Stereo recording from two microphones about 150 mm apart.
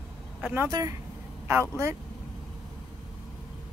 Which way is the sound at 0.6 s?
25° right (ahead or behind).